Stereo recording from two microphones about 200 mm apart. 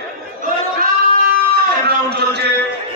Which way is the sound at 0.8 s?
50° right (ahead or behind).